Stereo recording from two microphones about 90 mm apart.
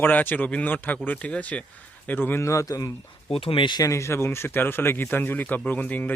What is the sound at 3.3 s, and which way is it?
Speech, 90° left.